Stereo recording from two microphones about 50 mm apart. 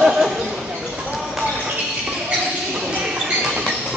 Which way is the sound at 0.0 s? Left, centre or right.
Centre.